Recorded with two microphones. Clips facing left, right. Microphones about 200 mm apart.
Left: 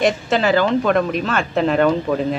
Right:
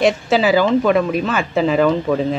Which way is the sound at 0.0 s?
5° right (ahead or behind).